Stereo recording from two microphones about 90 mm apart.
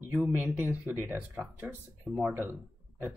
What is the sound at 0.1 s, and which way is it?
Speech, 20° right (ahead or behind).